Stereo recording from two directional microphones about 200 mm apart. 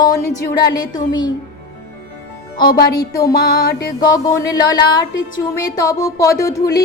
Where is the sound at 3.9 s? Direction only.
20° left (ahead or behind).